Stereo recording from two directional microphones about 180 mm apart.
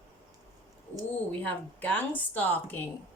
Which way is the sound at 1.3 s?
10° left (ahead or behind).